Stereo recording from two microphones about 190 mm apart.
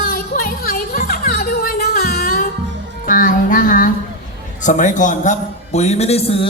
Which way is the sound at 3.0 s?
45° left (ahead or behind).